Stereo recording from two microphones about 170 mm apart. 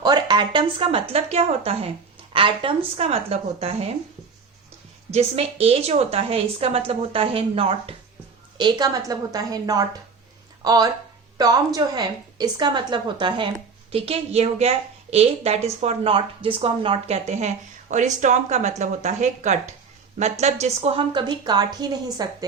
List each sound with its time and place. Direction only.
0.0 s a woman's voice: 25° right (ahead or behind)
5.1 s a woman's voice: 35° right (ahead or behind)